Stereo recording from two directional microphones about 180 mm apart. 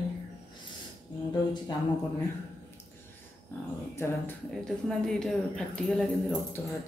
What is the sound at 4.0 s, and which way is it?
Speech, 10° left (ahead or behind).